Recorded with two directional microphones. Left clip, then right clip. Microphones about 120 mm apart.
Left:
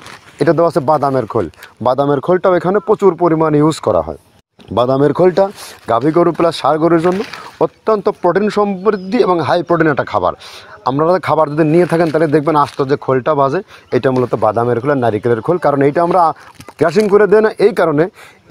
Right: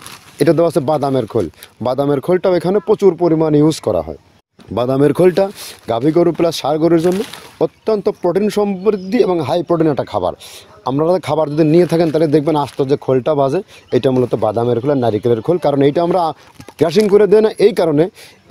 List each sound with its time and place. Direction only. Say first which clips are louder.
0.4 s speech: left 1 dB; 35° right (ahead or behind)
1.8 s speech: left 3 dB; 10° right (ahead or behind); by 3.8 s 25° right (ahead or behind)
5.0 s speech: right 2 dB; 35° right (ahead or behind)
6.9 s speech: left 1 dB; 35° right (ahead or behind)
7.6 s speech: left 2 dB; 25° right (ahead or behind)